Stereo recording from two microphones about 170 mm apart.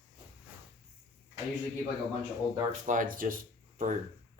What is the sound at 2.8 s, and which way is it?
Speech, 50° right (ahead or behind).